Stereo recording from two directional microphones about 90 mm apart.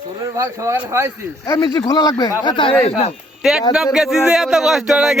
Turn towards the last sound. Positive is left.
turn(degrees=-5)  # may be behind; listen again after turning